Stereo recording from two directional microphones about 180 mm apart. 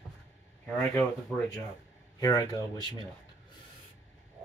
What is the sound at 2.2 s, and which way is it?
Speech, 20° left (ahead or behind).